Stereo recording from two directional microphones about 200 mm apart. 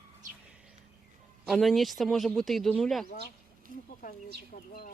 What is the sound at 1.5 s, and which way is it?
Speech, centre (ahead or behind).